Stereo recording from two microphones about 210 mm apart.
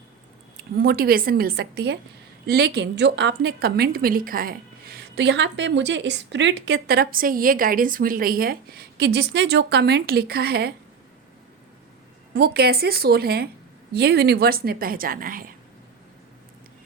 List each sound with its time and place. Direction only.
0.8 s a woman's voice: 45° right (ahead or behind)
12.3 s a woman's voice: 50° right (ahead or behind)